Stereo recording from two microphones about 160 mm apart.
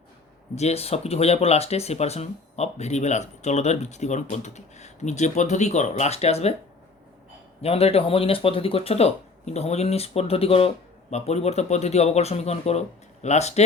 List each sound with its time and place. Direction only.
0.5 s speech: 40° left (ahead or behind)
7.6 s speech: 40° left (ahead or behind)